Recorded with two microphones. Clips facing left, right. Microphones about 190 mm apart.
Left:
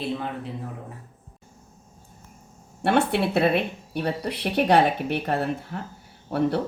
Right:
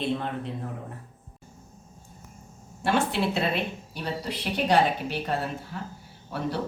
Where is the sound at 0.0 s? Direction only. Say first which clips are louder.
Even; 5° left (ahead or behind).